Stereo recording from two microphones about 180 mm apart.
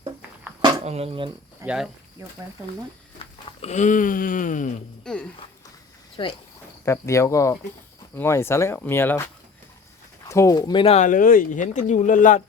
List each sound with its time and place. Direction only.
0.9 s speech: 35° right (ahead or behind)
1.6 s speech: 5° right (ahead or behind)
2.2 s speech: 15° right (ahead or behind)
3.6 s speech: 40° left (ahead or behind)
5.0 s speech: 5° left (ahead or behind)
6.2 s speech: 25° left (ahead or behind)
6.8 s speech: 15° left (ahead or behind); by 12.4 s 45° left (ahead or behind)